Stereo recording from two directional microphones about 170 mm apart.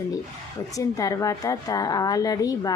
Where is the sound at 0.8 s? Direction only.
20° left (ahead or behind).